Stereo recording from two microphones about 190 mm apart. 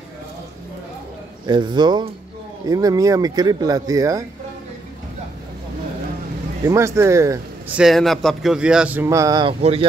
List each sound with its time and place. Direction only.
1.5 s speech: 25° right (ahead or behind)
6.6 s speech: 15° right (ahead or behind)
7.8 s speech: centre (ahead or behind); by 9.8 s 30° right (ahead or behind)